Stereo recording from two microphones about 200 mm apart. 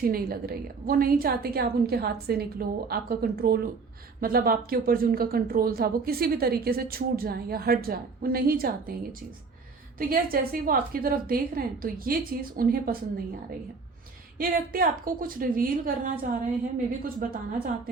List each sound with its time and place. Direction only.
0.0 s speech: 50° right (ahead or behind)
10.0 s speech: 45° right (ahead or behind)
14.3 s speech: 45° right (ahead or behind)